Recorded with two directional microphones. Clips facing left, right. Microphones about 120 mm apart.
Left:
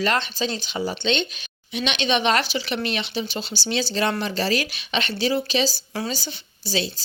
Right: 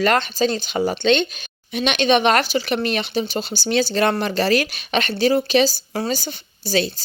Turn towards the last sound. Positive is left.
turn(degrees=-50)  # may be behind; listen again after turning